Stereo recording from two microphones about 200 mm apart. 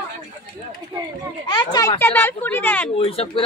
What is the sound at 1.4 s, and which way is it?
Speech, 20° left (ahead or behind).